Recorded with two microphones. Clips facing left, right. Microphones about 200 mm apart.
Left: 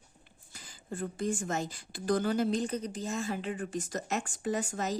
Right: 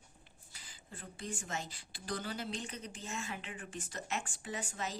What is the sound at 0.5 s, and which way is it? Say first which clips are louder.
Speech: left 14 dB; 45° left (ahead or behind).